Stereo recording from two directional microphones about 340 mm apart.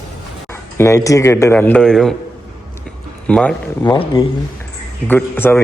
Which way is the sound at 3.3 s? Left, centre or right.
Centre.